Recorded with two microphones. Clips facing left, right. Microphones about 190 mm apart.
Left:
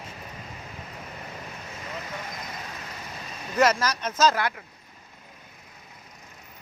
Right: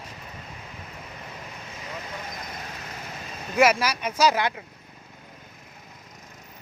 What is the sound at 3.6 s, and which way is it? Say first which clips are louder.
Speech: right 2 dB; 10° right (ahead or behind).